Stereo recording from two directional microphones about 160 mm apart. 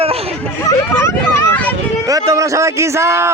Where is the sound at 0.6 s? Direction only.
15° left (ahead or behind).